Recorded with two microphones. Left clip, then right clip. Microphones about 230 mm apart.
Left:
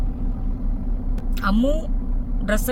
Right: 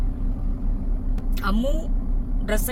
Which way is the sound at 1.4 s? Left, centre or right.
Centre.